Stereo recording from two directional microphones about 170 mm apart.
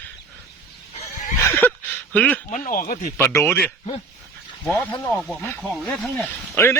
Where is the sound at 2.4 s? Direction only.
55° left (ahead or behind).